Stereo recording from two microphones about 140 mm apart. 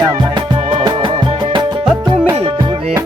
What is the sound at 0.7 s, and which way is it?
Music, 35° right (ahead or behind).